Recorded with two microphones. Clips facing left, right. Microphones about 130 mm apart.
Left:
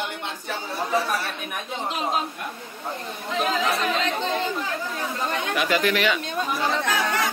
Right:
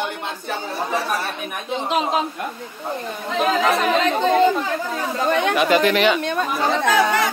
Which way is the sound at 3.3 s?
65° right (ahead or behind).